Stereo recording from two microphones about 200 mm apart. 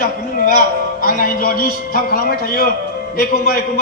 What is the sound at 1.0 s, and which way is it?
A man's voice, 45° left (ahead or behind).